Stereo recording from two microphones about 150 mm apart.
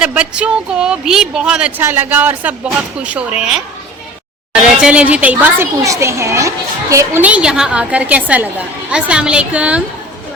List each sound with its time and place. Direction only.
0.0 s a woman's voice: 5° right (ahead or behind)
5.8 s a child's voice: 20° right (ahead or behind)